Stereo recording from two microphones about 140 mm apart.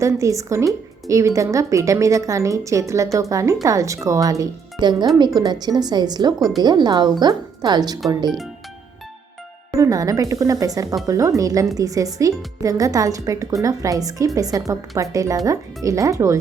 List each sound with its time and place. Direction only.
0.0 s speech: 20° right (ahead or behind)
9.7 s speech: 25° right (ahead or behind)